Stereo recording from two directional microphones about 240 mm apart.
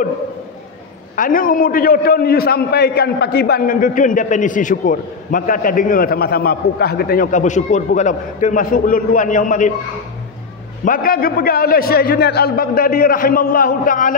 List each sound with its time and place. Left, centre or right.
1.1 s a man's voice: left
10.9 s a man's voice: left